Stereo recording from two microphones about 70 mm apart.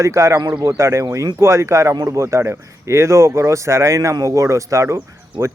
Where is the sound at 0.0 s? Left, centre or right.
Right.